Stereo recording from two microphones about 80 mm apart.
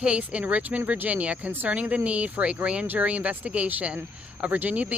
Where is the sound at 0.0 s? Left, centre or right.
Centre.